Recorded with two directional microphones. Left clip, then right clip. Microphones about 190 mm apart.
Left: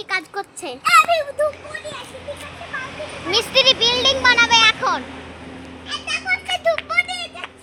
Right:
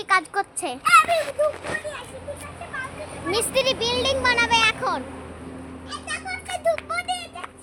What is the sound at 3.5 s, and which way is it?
Speech, centre (ahead or behind).